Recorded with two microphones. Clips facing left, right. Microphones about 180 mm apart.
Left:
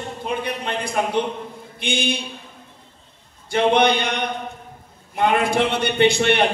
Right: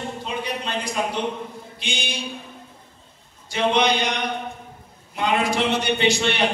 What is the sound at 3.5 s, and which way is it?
Speech, 55° left (ahead or behind).